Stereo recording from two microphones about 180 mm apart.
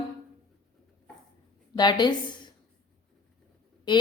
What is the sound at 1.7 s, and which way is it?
Speech, 25° left (ahead or behind).